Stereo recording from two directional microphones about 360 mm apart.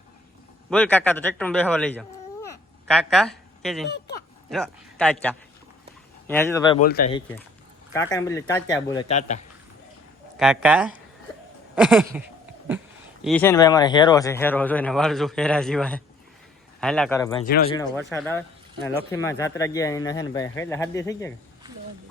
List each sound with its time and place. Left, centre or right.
0.7 s speech: centre
6.8 s speech: left
7.1 s speech: centre
10.3 s speech: centre
13.2 s speech: centre